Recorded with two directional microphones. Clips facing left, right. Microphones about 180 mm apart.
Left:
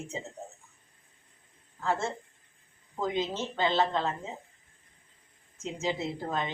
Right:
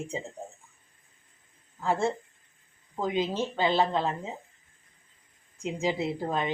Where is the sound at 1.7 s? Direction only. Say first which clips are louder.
Right 4 dB; 15° right (ahead or behind).